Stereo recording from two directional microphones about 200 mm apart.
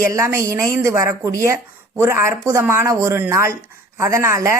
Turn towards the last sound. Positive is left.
turn(degrees=-15)  # may be behind; listen again after turning